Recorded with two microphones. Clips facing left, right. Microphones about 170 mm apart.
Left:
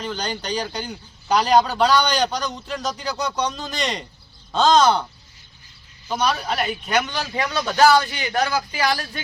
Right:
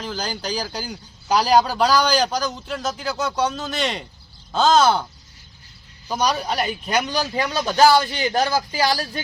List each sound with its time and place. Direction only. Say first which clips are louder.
0.0 s a man's voice: even; 5° right (ahead or behind)
6.2 s speech: right 1 dB; 35° right (ahead or behind)